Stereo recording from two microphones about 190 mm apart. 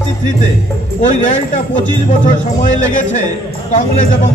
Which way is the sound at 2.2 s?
40° left (ahead or behind).